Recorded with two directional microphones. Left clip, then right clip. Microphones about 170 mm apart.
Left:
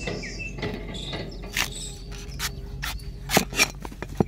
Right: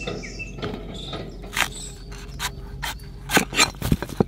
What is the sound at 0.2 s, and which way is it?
Cricket, 10° left (ahead or behind).